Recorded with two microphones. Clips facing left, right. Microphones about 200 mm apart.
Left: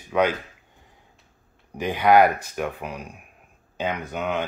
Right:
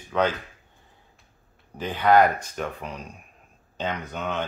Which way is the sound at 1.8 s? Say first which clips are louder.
Left 2 dB; 10° left (ahead or behind).